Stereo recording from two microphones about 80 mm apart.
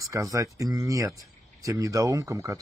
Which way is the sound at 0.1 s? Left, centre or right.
Right.